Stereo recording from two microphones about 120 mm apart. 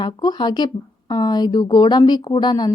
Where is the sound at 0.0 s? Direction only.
35° left (ahead or behind).